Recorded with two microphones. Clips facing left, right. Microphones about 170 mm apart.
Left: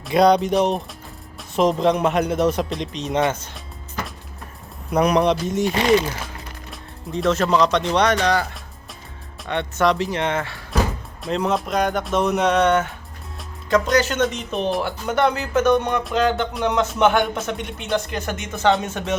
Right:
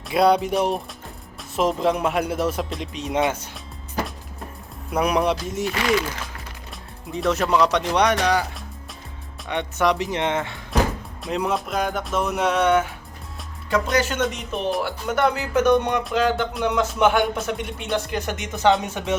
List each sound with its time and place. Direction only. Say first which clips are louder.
0.1 s speech: left 3 dB; 5° right (ahead or behind)
4.9 s speech: left 3 dB; 5° right (ahead or behind)
5.6 s speech: left 4 dB; 25° left (ahead or behind)
7.3 s speech: left 1 dB; 10° right (ahead or behind)
9.5 s speech: left 2 dB; 15° right (ahead or behind)